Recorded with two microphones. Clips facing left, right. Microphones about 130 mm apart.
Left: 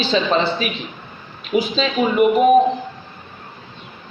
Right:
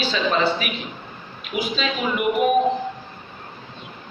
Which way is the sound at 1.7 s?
35° left (ahead or behind).